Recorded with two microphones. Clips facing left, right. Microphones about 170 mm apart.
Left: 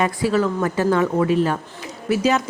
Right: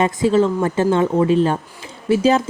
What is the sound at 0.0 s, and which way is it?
Speech, 25° right (ahead or behind).